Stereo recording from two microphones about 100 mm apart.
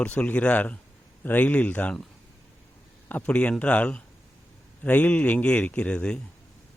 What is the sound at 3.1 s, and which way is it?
Speech, 15° left (ahead or behind).